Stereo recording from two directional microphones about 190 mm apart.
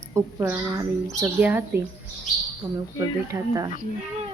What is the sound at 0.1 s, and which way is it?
A woman's voice, 15° right (ahead or behind).